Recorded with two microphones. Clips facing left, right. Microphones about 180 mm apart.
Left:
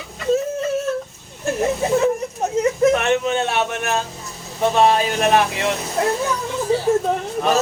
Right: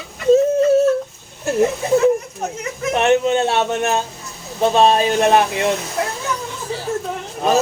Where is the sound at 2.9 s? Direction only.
25° right (ahead or behind).